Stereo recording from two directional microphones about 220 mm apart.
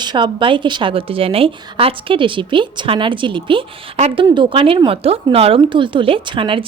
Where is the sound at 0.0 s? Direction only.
20° right (ahead or behind).